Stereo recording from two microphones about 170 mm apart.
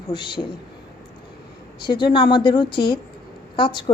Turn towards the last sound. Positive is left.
turn(degrees=30)  # may be behind; listen again after turning